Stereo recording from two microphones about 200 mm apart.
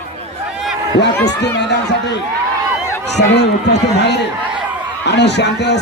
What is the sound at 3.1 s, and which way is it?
Speech, 55° left (ahead or behind).